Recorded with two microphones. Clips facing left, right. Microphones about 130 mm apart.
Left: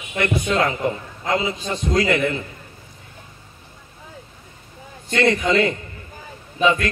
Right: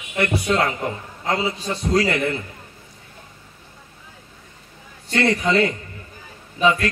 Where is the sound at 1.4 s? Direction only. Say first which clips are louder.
Even; 35° right (ahead or behind).